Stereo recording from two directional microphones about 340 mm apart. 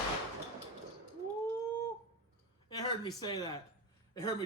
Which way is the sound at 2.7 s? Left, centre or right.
Centre.